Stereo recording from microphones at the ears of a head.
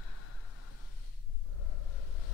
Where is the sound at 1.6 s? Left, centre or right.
Left.